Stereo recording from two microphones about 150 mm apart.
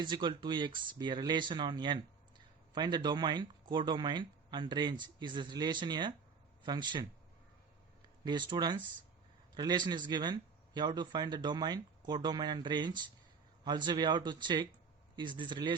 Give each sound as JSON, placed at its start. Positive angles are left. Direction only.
{"t": 0.0, "sound": "speech", "side_deg": -30}
{"t": 8.2, "sound": "speech", "side_deg": -30}